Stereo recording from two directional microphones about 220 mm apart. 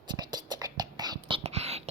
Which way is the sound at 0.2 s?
20° right (ahead or behind).